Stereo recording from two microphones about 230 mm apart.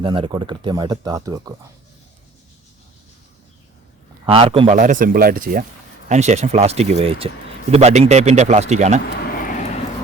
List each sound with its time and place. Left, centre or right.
0.0 s speech: right
4.3 s speech: right
9.0 s a sound: left